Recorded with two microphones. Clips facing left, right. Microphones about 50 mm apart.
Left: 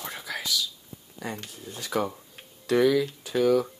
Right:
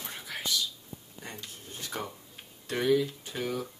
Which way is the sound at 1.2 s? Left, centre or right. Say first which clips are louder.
Left 9 dB; left.